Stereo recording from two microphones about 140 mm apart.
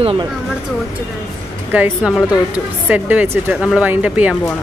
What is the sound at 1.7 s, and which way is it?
Speech, 10° right (ahead or behind).